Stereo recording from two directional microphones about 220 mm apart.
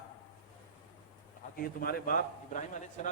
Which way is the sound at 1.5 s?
40° left (ahead or behind).